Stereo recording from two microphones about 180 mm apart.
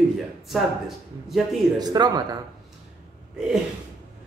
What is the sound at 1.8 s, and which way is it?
Speech, 20° right (ahead or behind).